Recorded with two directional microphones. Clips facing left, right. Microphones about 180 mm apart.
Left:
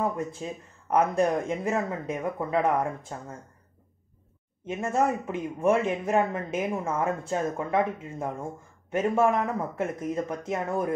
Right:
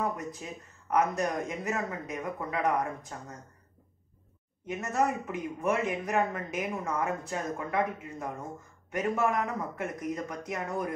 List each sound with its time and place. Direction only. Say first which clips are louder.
0.0 s a man's voice: left 4 dB; 25° left (ahead or behind)
4.6 s a man's voice: left 3 dB; 25° left (ahead or behind)